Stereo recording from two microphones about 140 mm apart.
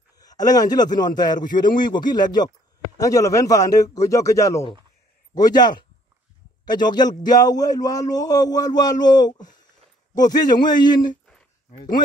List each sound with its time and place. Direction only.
0.2 s a man's voice: 25° left (ahead or behind)